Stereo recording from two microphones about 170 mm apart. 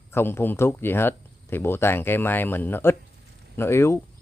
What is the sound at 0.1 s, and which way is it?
Speech, 15° left (ahead or behind).